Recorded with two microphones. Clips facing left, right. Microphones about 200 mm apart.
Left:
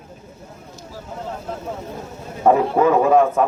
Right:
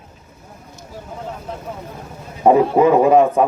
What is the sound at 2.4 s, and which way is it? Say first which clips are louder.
A man's voice: right 3 dB; 15° right (ahead or behind).